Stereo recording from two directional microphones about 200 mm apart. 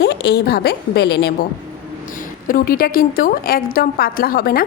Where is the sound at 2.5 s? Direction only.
45° left (ahead or behind).